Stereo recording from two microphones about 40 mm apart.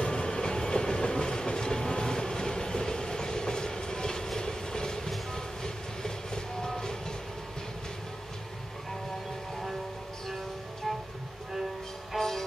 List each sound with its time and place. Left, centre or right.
0.0 s train: left
12.2 s music: centre